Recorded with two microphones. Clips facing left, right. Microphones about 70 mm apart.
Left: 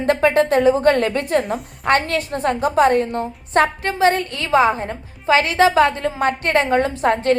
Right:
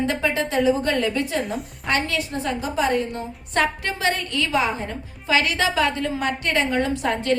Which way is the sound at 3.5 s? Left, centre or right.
Left.